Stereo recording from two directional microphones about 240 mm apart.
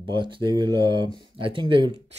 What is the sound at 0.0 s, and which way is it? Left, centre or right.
Speech, centre.